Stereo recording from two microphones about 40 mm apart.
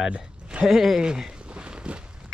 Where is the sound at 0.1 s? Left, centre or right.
Right.